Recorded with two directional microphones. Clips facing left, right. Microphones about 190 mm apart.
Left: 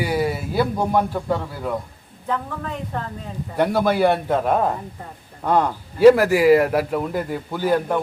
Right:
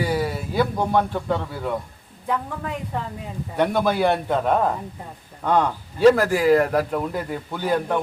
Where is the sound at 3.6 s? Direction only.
5° left (ahead or behind).